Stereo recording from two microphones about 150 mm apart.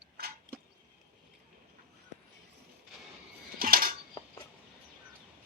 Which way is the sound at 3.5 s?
75° right (ahead or behind).